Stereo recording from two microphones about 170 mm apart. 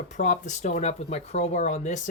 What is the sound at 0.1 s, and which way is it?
Speech, 45° left (ahead or behind).